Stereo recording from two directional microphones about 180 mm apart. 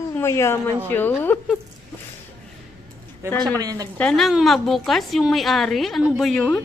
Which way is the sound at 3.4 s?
20° right (ahead or behind).